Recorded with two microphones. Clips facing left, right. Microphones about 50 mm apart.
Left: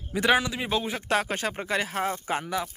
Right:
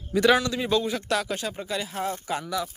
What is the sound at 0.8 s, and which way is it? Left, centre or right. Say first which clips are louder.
Speech: even; left.